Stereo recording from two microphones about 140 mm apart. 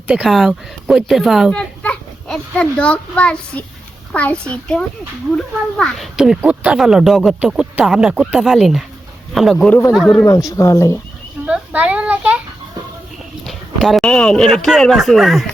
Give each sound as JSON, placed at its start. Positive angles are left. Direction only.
{"t": 0.1, "sound": "a woman's voice", "side_deg": -5}
{"t": 10.2, "sound": "speech", "side_deg": 25}
{"t": 11.4, "sound": "speech", "side_deg": -10}
{"t": 13.4, "sound": "speech", "side_deg": 0}